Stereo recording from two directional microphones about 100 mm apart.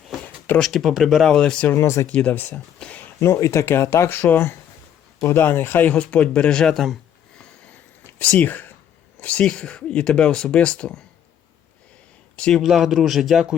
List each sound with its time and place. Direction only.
0.6 s speech: centre (ahead or behind)
1.7 s speech: 30° left (ahead or behind)
2.0 s speech: 15° left (ahead or behind)
2.7 s a sound: 10° left (ahead or behind)
3.2 s speech: 30° left (ahead or behind); by 6.9 s 5° left (ahead or behind)
8.2 s speech: 15° left (ahead or behind)
12.4 s speech: 5° left (ahead or behind)